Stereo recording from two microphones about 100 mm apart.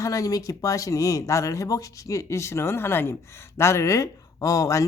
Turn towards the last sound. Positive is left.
turn(degrees=35)  # may be behind; listen again after turning